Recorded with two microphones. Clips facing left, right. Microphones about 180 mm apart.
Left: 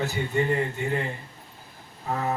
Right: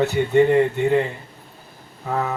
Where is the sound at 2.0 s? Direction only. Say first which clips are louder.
Right 5 dB; 70° right (ahead or behind).